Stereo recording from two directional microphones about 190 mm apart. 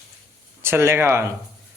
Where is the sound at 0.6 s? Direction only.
10° right (ahead or behind).